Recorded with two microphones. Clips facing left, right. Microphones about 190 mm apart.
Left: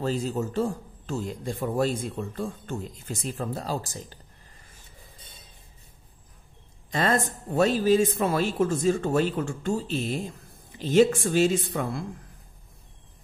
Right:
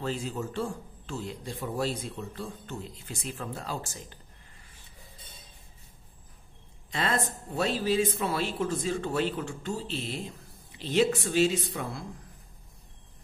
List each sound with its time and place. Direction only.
0.0 s a man's voice: 40° left (ahead or behind)
6.9 s a man's voice: 45° left (ahead or behind)